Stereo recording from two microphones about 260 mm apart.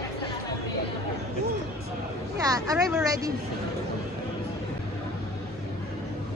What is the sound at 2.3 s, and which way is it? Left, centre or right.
Speech, centre.